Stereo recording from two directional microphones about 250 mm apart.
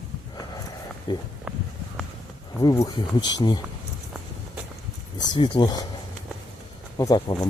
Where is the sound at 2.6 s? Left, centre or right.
Centre.